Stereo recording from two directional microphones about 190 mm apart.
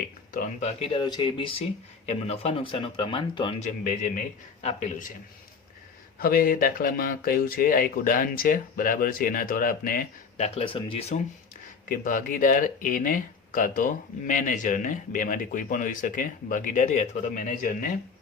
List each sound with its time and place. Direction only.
0.6 s speech: 30° left (ahead or behind)
3.6 s speech: 45° left (ahead or behind)
6.1 s speech: 50° left (ahead or behind); by 11.2 s 35° left (ahead or behind)
11.9 s speech: 45° left (ahead or behind)